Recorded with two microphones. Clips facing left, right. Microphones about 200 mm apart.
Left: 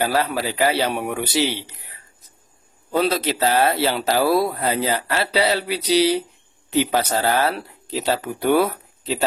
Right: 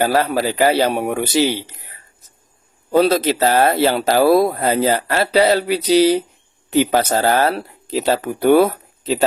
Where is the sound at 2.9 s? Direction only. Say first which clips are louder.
Right 6 dB; 45° right (ahead or behind).